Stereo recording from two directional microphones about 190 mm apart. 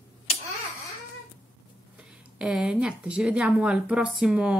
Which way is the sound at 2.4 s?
5° right (ahead or behind).